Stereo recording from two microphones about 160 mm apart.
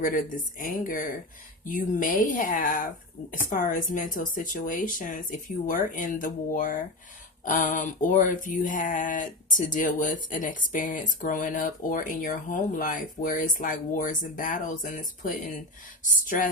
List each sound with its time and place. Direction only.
0.0 s speech: 60° left (ahead or behind)